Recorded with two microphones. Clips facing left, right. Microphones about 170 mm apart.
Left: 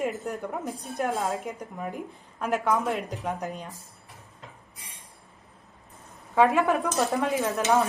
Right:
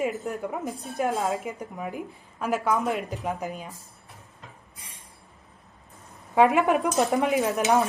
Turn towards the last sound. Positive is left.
turn(degrees=-15)  # may be behind; listen again after turning